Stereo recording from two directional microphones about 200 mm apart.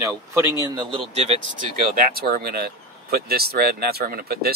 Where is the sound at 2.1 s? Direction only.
50° right (ahead or behind).